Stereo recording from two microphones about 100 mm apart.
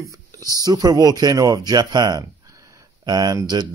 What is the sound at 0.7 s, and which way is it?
A man's voice, 40° right (ahead or behind).